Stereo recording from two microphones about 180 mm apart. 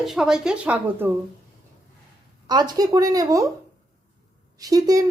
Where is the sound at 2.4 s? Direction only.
20° right (ahead or behind).